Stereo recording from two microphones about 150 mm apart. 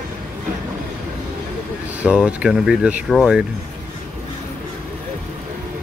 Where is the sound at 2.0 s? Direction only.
10° right (ahead or behind).